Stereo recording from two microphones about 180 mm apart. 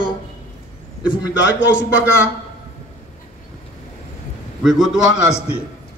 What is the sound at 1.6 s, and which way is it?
Speech, 90° left.